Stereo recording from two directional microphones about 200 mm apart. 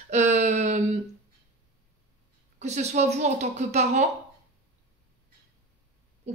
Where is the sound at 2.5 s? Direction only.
35° right (ahead or behind).